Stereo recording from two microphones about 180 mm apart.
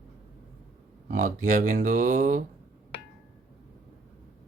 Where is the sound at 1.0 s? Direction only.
45° right (ahead or behind).